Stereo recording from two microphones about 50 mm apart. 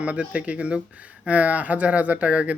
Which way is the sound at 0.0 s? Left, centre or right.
Right.